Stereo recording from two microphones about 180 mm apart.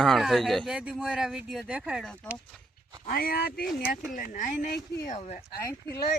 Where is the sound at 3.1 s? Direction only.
55° left (ahead or behind).